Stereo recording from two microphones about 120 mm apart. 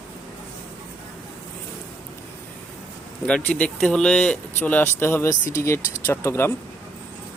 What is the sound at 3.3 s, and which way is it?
Speech, 10° left (ahead or behind).